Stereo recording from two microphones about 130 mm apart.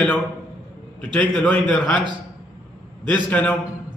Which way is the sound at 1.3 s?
10° left (ahead or behind).